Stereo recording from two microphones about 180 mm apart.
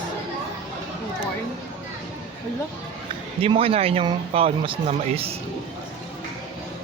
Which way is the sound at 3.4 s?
30° right (ahead or behind).